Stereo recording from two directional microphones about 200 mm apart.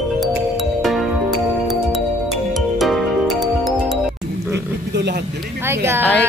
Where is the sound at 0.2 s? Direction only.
Centre (ahead or behind).